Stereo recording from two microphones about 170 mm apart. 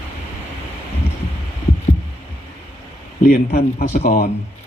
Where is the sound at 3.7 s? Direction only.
50° left (ahead or behind).